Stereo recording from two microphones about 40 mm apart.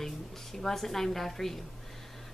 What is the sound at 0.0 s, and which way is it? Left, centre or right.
A woman's voice, centre.